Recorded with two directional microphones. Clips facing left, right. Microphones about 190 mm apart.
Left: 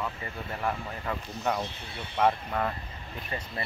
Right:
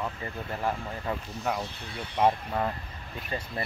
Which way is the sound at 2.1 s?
15° right (ahead or behind).